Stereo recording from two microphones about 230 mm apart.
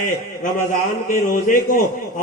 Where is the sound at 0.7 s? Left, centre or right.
Left.